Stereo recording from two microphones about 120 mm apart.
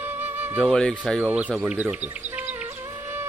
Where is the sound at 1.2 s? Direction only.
10° right (ahead or behind).